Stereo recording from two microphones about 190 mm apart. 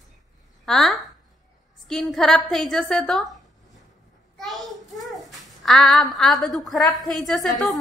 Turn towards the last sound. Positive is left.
turn(degrees=0)  # may be behind; listen again after turning